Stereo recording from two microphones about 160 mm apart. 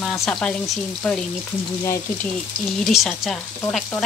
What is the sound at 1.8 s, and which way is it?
Speech, 20° left (ahead or behind).